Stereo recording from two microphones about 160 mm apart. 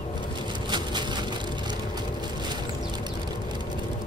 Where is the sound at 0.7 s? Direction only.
30° right (ahead or behind).